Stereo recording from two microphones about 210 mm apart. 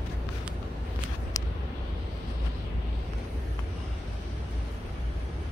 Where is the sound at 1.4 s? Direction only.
15° left (ahead or behind).